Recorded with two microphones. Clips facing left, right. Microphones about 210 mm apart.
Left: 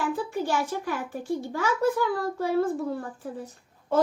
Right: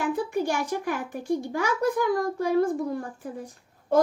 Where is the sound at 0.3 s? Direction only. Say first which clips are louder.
Right 1 dB; 15° right (ahead or behind).